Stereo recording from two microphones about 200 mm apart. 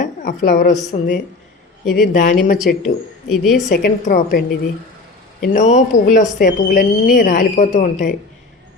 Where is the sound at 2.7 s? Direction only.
50° left (ahead or behind).